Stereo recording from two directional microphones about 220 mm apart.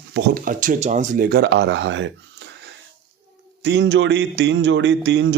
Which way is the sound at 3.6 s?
55° right (ahead or behind).